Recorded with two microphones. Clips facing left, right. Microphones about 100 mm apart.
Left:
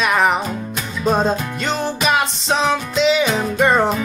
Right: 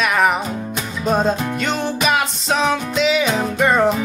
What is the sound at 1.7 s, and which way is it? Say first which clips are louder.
Music: left 2 dB; centre (ahead or behind).